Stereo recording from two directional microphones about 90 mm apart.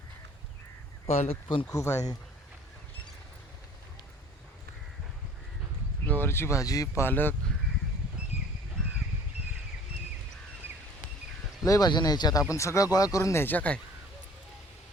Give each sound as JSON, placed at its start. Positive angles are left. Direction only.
{"t": 1.3, "sound": "speech", "side_deg": 85}
{"t": 1.7, "sound": "speech", "side_deg": 35}
{"t": 6.1, "sound": "speech", "side_deg": 25}
{"t": 7.0, "sound": "speech", "side_deg": 25}
{"t": 11.6, "sound": "speech", "side_deg": 40}
{"t": 11.9, "sound": "speech", "side_deg": 50}
{"t": 12.4, "sound": "speech", "side_deg": 35}
{"t": 13.4, "sound": "speech", "side_deg": 20}